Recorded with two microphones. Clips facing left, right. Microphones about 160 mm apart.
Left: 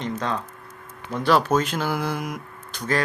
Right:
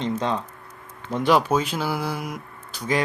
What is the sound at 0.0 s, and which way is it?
Speech, 20° right (ahead or behind).